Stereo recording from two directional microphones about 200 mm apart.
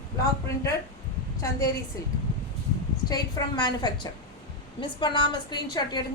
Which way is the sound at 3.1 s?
20° left (ahead or behind).